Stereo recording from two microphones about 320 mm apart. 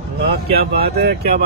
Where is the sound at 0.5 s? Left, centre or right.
Right.